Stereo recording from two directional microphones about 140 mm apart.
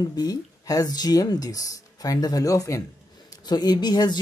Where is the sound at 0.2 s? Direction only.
25° left (ahead or behind).